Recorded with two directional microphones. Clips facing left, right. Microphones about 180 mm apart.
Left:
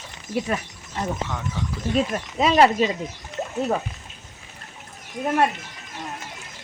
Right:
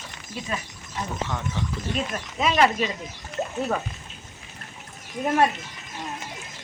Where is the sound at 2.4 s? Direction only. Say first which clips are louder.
Left 4 dB; 35° left (ahead or behind).